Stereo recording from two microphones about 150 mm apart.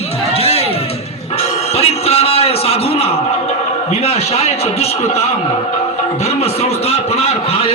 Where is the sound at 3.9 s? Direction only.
45° left (ahead or behind).